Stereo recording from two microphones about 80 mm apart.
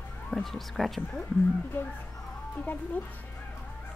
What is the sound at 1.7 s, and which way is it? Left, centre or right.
Speech, left.